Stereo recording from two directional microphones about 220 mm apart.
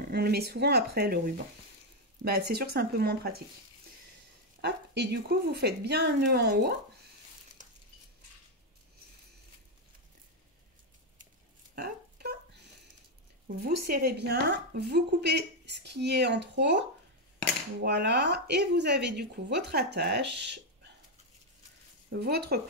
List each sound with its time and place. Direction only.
0.1 s speech: 45° right (ahead or behind)
4.6 s speech: 50° right (ahead or behind)
7.6 s a sound: 35° right (ahead or behind)
11.7 s a sound: 45° right (ahead or behind)
13.6 s speech: 45° right (ahead or behind)
17.8 s speech: 50° right (ahead or behind)
22.1 s speech: 45° right (ahead or behind)